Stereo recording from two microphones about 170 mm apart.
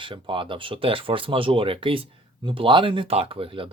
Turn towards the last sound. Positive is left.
turn(degrees=-30)  # may be behind; listen again after turning